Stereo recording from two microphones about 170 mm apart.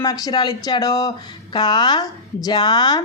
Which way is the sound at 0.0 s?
25° left (ahead or behind).